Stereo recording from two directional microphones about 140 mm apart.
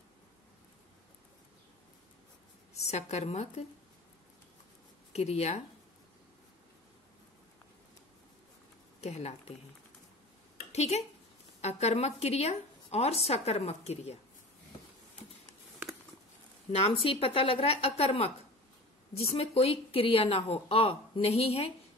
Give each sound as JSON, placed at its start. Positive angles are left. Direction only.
{"t": 2.8, "sound": "speech", "side_deg": 50}
{"t": 5.1, "sound": "speech", "side_deg": 50}
{"t": 9.0, "sound": "speech", "side_deg": 50}
{"t": 10.7, "sound": "speech", "side_deg": 50}
{"t": 16.7, "sound": "speech", "side_deg": 40}